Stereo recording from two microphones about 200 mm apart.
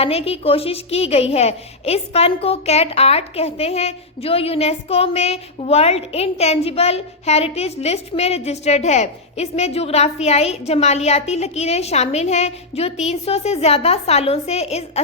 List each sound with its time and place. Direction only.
0.0 s a woman's voice: 30° left (ahead or behind)